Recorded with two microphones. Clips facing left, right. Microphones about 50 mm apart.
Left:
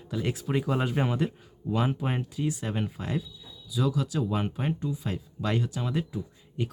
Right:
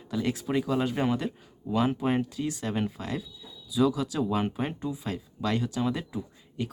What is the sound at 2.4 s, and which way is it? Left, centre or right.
Speech, centre.